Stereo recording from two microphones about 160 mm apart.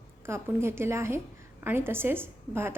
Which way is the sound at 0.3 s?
15° right (ahead or behind).